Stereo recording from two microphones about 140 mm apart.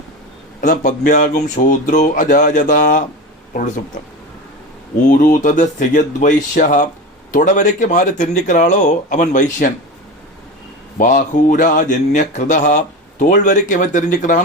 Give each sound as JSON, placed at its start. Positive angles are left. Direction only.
{"t": 0.6, "sound": "speech", "side_deg": 70}
{"t": 5.0, "sound": "speech", "side_deg": 80}
{"t": 10.9, "sound": "speech", "side_deg": 70}